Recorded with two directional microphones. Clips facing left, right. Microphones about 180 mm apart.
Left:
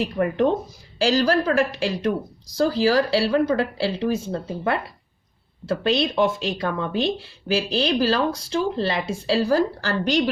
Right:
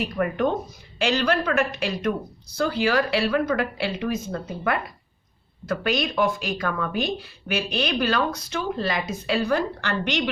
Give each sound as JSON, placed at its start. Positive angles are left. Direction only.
{"t": 0.0, "sound": "speech", "side_deg": 30}